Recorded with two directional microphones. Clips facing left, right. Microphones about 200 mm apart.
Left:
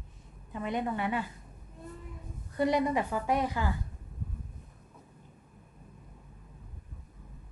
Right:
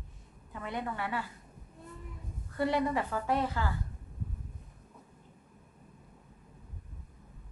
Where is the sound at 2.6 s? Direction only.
15° left (ahead or behind).